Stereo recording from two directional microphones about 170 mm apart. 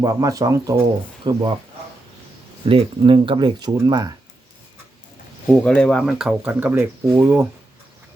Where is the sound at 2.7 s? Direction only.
30° right (ahead or behind).